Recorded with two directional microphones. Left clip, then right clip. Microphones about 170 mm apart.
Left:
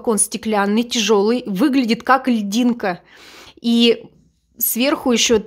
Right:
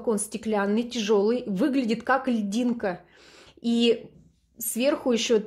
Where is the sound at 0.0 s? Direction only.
30° left (ahead or behind).